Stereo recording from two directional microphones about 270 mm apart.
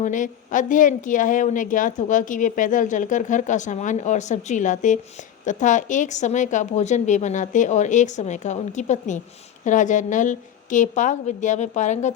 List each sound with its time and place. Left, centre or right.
0.0 s a woman's voice: left